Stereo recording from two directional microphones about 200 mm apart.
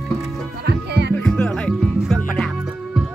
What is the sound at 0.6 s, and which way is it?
Music, 55° right (ahead or behind).